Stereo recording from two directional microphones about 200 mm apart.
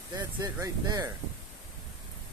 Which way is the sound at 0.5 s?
20° right (ahead or behind).